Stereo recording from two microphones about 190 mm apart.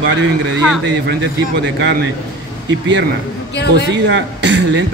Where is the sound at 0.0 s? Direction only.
75° right (ahead or behind).